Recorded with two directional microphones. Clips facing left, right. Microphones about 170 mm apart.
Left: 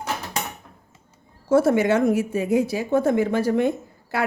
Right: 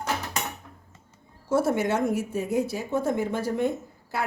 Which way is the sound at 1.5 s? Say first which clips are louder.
Left 6 dB; 90° left.